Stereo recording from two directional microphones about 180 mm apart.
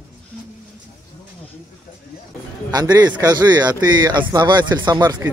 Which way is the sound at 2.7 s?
20° right (ahead or behind).